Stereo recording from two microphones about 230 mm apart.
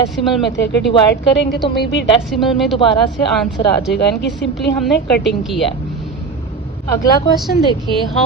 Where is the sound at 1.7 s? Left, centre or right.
Left.